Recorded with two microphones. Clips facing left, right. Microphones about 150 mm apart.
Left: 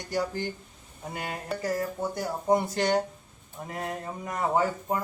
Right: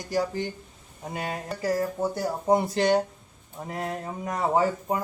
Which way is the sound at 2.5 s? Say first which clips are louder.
Right 2 dB; 30° right (ahead or behind).